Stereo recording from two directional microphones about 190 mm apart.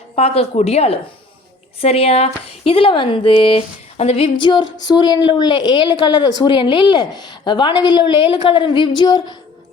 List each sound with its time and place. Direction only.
0.2 s speech: 35° left (ahead or behind)